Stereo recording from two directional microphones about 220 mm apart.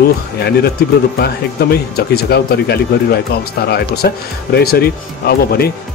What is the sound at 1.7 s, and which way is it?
Speech, 45° left (ahead or behind).